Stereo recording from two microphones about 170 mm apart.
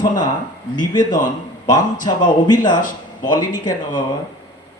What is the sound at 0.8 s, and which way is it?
Speech, 25° left (ahead or behind).